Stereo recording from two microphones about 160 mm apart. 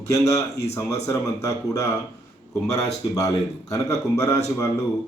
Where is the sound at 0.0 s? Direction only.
20° left (ahead or behind).